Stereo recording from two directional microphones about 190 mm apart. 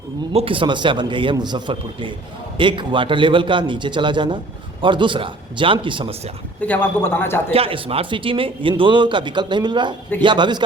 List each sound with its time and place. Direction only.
0.3 s speech: 30° right (ahead or behind)
6.7 s speech: 10° left (ahead or behind)
7.5 s speech: 30° right (ahead or behind)